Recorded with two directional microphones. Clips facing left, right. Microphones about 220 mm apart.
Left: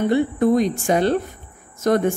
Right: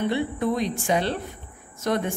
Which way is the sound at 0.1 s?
45° left (ahead or behind).